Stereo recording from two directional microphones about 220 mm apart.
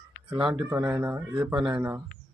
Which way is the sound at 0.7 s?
10° right (ahead or behind).